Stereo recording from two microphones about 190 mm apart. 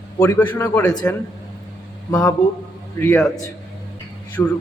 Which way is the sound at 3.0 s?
10° left (ahead or behind).